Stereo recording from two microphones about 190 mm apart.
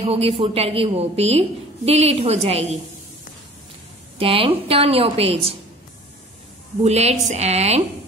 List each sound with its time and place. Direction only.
0.0 s a woman's voice: 30° right (ahead or behind)
4.2 s a woman's voice: 30° right (ahead or behind)
6.8 s a woman's voice: 35° right (ahead or behind)